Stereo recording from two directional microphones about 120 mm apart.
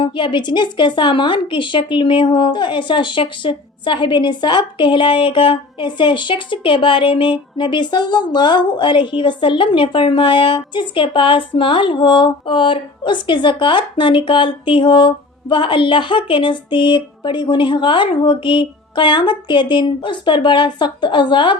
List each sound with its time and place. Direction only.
0.0 s a woman's voice: 40° left (ahead or behind)